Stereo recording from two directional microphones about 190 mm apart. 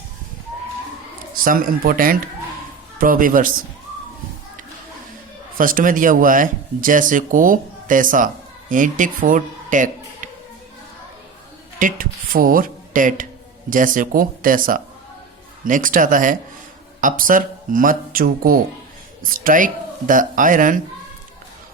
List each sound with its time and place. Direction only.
1.3 s speech: 45° right (ahead or behind)
5.5 s speech: 45° right (ahead or behind)
11.8 s speech: 45° right (ahead or behind)